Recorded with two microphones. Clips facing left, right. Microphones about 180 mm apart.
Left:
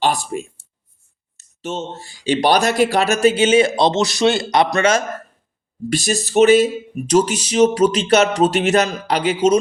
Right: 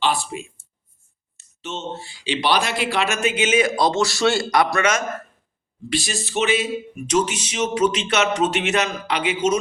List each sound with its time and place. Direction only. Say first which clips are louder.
0.0 s speech: left 3 dB; 45° left (ahead or behind)
5.9 s speech: left 6 dB; 45° left (ahead or behind)